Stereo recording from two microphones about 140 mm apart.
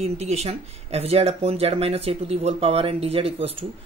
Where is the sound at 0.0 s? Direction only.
50° right (ahead or behind).